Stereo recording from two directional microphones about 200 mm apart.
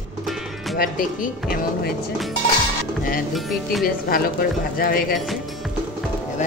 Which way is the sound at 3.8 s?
45° left (ahead or behind).